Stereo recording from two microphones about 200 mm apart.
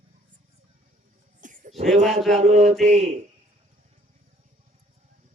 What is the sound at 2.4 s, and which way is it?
Mantra, 30° right (ahead or behind).